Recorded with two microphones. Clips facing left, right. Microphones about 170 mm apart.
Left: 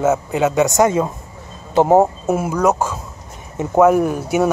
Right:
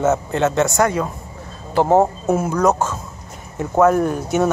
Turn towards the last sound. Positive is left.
turn(degrees=10)  # may be behind; listen again after turning